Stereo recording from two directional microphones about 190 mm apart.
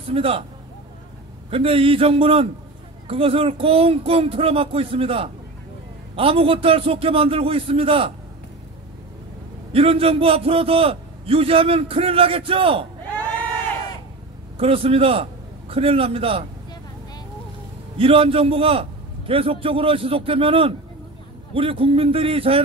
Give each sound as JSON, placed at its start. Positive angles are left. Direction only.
{"t": 0.1, "sound": "a man's voice", "side_deg": -30}
{"t": 1.5, "sound": "a man's voice", "side_deg": -30}
{"t": 9.7, "sound": "a man's voice", "side_deg": -30}
{"t": 14.6, "sound": "a man's voice", "side_deg": -30}
{"t": 17.9, "sound": "a man's voice", "side_deg": -30}